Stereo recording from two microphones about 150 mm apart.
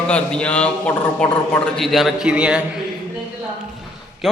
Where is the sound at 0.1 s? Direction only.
5° left (ahead or behind).